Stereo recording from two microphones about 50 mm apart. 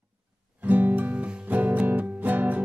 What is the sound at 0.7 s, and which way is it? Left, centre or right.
Music, right.